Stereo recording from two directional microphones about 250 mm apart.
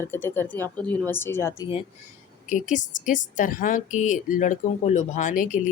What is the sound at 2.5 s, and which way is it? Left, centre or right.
A woman's voice, left.